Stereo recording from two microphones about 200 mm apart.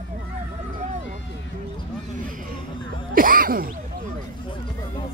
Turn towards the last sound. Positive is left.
turn(degrees=-45)  # may be behind; listen again after turning